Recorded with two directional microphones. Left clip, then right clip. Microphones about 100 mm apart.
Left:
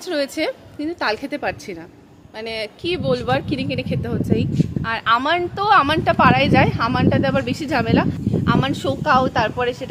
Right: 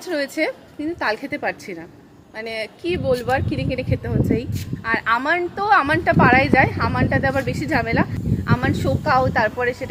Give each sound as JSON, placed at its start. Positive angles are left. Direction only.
{"t": 0.1, "sound": "speech", "side_deg": 35}